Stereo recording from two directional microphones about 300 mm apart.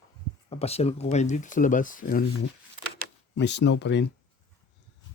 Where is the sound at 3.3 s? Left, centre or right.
Left.